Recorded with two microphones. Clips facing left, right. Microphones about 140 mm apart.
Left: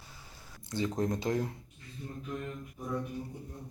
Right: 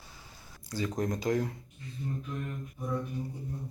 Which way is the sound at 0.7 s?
25° left (ahead or behind).